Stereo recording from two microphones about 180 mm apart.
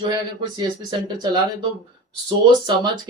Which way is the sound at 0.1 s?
25° right (ahead or behind).